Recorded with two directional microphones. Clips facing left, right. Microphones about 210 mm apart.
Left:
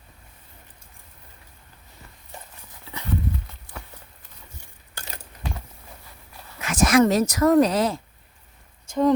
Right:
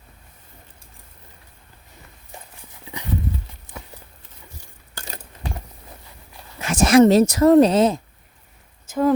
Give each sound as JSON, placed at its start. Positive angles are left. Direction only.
{"t": 2.8, "sound": "horse", "side_deg": -15}
{"t": 6.6, "sound": "speech", "side_deg": -30}
{"t": 8.9, "sound": "speech", "side_deg": -5}